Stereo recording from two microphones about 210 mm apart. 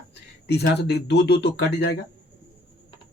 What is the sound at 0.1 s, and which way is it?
Speech, 50° left (ahead or behind).